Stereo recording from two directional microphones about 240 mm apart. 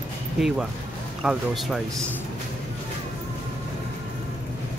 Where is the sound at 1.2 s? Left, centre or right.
Centre.